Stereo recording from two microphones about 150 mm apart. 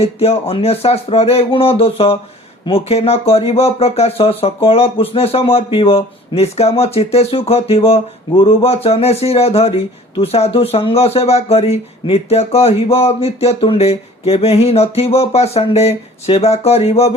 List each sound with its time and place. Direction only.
0.0 s speech: 40° left (ahead or behind)